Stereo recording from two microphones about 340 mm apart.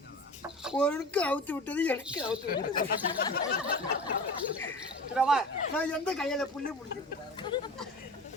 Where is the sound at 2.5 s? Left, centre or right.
Left.